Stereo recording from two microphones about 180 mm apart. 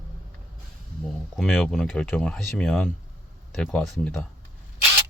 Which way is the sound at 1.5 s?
Centre (ahead or behind).